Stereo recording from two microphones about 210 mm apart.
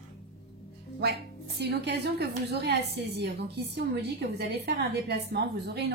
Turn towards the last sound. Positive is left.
turn(degrees=-50)  # may be behind; listen again after turning